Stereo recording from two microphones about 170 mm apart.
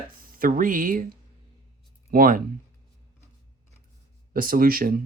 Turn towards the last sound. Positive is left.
turn(degrees=-60)  # may be behind; listen again after turning